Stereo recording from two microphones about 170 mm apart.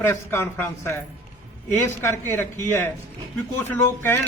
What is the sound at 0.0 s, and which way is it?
Speech, 15° left (ahead or behind).